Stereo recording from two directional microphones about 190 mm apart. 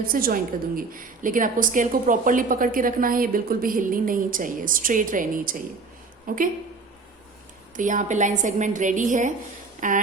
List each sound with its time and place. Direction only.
0.1 s a woman's voice: 50° right (ahead or behind)
7.8 s a woman's voice: 40° right (ahead or behind)
9.8 s a sound: 40° right (ahead or behind)